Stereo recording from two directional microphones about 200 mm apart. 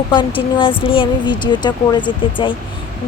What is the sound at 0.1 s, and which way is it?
Speech, 25° left (ahead or behind).